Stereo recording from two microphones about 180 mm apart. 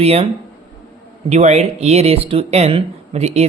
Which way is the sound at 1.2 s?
40° right (ahead or behind).